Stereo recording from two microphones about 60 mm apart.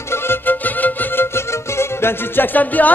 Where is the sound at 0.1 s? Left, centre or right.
Left.